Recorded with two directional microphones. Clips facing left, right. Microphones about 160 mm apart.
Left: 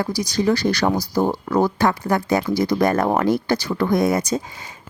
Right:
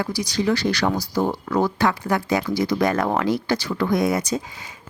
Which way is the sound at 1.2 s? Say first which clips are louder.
Left 2 dB; 35° left (ahead or behind).